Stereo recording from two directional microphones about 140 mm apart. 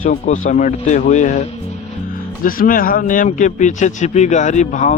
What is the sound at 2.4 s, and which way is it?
Speech, 85° left.